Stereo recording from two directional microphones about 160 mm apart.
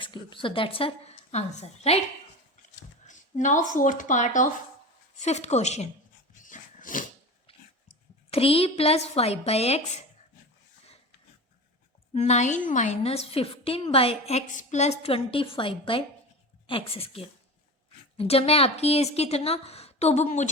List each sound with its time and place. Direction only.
0.0 s a woman's voice: 30° left (ahead or behind)
3.0 s a woman's voice: 50° left (ahead or behind)
6.4 s dog: 55° left (ahead or behind)
8.3 s a woman's voice: 35° left (ahead or behind)
12.1 s a woman's voice: 45° left (ahead or behind)